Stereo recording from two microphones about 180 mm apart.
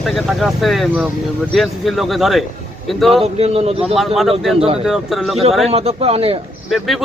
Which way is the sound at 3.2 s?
35° right (ahead or behind).